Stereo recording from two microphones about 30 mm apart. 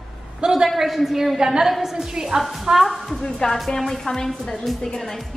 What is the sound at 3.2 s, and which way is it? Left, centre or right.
Speech, centre.